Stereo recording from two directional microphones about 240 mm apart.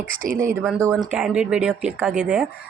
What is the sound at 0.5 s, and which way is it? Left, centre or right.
Speech, centre.